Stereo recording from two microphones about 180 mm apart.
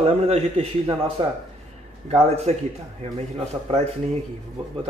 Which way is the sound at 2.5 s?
35° right (ahead or behind).